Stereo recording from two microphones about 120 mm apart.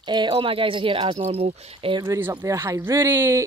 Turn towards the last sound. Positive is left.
turn(degrees=-20)  # may be behind; listen again after turning